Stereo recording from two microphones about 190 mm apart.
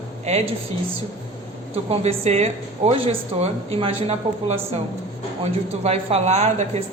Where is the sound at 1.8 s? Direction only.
35° right (ahead or behind).